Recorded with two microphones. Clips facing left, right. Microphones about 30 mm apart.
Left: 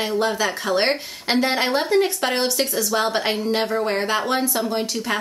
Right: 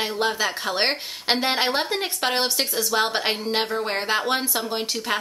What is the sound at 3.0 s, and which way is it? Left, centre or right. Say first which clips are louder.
A woman's voice: left 3 dB; centre.